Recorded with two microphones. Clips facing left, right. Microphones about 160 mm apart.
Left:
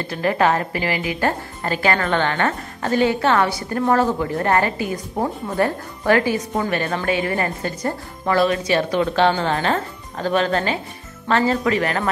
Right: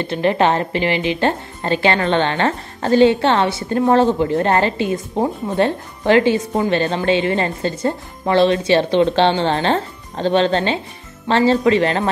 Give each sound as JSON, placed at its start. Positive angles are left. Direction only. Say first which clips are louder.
{"t": 0.0, "sound": "a woman's voice", "louder": "right 3 dB", "side_deg": -25}